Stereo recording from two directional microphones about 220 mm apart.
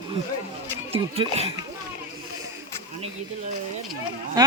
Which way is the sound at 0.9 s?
25° right (ahead or behind).